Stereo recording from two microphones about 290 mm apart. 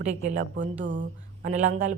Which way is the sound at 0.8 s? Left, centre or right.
Right.